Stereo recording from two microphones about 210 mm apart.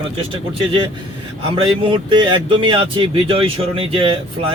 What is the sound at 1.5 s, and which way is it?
Speech, 25° right (ahead or behind).